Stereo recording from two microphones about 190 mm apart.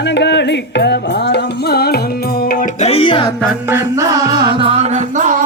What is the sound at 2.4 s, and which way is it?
Music, 45° left (ahead or behind).